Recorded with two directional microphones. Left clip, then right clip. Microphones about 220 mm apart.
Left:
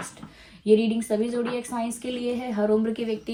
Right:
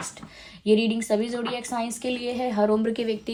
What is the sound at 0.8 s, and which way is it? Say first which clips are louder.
Speech: right 1 dB; 35° right (ahead or behind).